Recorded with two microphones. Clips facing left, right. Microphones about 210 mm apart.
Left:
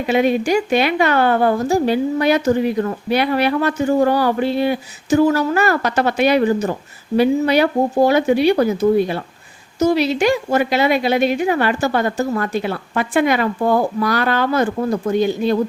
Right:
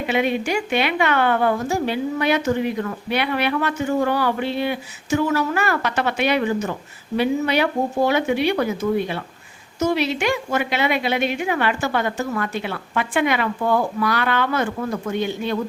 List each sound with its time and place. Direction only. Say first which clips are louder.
0.1 s a woman's voice: left 6 dB; 40° left (ahead or behind)